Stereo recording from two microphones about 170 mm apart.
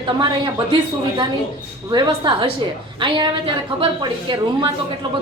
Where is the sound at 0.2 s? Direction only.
25° right (ahead or behind).